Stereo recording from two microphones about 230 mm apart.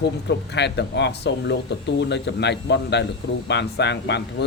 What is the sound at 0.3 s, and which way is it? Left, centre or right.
A man's voice, left.